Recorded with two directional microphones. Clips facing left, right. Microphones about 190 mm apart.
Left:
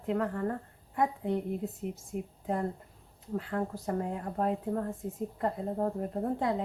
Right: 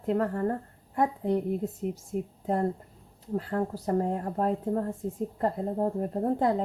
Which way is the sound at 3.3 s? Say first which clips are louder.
Right 4 dB; 40° right (ahead or behind).